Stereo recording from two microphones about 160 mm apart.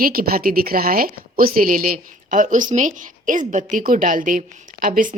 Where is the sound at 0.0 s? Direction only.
65° right (ahead or behind).